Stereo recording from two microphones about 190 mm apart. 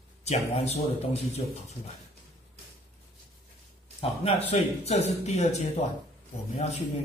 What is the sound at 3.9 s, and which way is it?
Speech, 30° left (ahead or behind).